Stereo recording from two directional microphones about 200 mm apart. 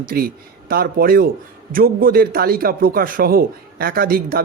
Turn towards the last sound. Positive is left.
turn(degrees=-45)  # may be behind; listen again after turning